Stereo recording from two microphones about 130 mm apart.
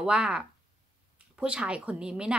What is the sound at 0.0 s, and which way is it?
Speech, 5° right (ahead or behind).